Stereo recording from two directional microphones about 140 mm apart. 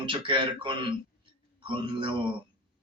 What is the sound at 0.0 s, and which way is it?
A man's voice, 35° right (ahead or behind).